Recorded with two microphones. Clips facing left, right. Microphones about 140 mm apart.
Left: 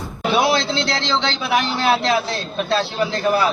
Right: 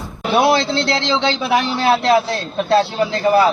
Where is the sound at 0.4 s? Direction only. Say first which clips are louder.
Right 3 dB; 60° right (ahead or behind).